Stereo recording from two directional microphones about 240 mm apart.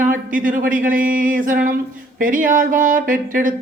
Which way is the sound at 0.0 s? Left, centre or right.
Right.